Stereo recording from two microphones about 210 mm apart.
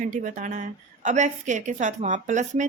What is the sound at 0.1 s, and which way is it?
A woman's voice, 35° right (ahead or behind).